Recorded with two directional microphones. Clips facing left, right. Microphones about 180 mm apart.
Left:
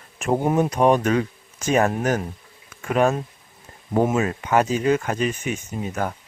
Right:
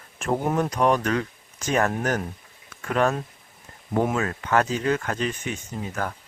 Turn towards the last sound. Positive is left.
turn(degrees=20)  # may be behind; listen again after turning